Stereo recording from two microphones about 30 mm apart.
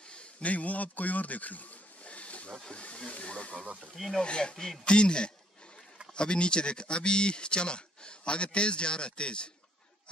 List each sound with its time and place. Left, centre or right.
0.4 s speech: left
3.9 s speech: centre
4.2 s speech: left